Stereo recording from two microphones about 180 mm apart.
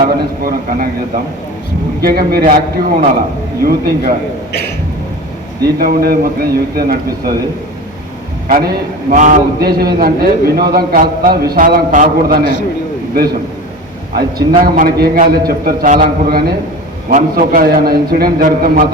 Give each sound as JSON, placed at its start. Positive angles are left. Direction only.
{"t": 0.0, "sound": "a man's voice", "side_deg": -50}
{"t": 5.6, "sound": "a man's voice", "side_deg": -55}
{"t": 8.4, "sound": "a man's voice", "side_deg": -55}
{"t": 14.2, "sound": "a man's voice", "side_deg": -55}